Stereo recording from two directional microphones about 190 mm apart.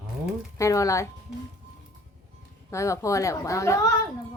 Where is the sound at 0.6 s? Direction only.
15° left (ahead or behind).